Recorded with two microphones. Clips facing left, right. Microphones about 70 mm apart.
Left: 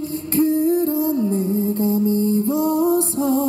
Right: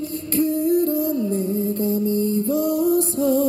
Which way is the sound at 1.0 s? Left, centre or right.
Left.